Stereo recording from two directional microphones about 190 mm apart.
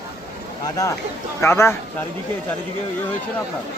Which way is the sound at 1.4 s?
15° left (ahead or behind).